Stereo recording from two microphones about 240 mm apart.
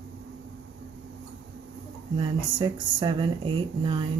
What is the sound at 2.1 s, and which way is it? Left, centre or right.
Speech, centre.